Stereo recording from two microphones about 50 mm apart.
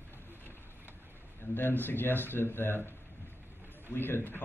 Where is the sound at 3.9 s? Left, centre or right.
Left.